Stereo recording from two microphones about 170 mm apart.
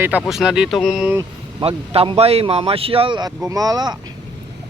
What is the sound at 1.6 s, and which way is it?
Speech, 35° right (ahead or behind).